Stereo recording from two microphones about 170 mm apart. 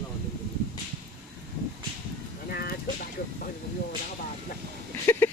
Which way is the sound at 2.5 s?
65° left (ahead or behind).